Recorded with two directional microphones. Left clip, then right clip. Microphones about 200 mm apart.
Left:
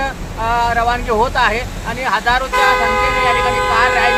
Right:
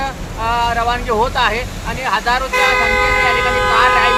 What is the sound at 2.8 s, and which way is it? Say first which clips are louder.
Speech: right 1 dB; 5° right (ahead or behind).